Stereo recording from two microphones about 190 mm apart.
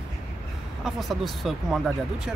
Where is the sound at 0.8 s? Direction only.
Centre (ahead or behind).